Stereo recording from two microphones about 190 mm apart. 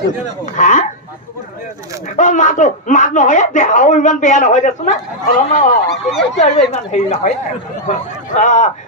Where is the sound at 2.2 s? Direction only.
40° left (ahead or behind).